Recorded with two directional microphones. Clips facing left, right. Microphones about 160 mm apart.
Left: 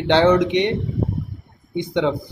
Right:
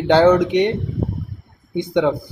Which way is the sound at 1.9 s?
5° right (ahead or behind).